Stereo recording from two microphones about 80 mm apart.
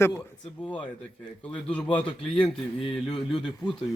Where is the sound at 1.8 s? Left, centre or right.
Left.